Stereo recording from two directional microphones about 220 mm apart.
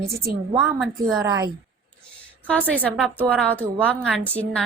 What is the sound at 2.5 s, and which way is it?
A woman's voice, 5° left (ahead or behind).